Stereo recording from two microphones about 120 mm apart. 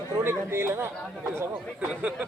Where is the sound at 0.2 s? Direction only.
20° right (ahead or behind).